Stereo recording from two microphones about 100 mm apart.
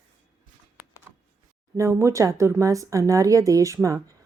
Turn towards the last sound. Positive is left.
turn(degrees=-30)  # may be behind; listen again after turning